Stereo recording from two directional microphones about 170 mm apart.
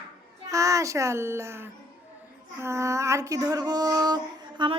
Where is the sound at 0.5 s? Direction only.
20° right (ahead or behind).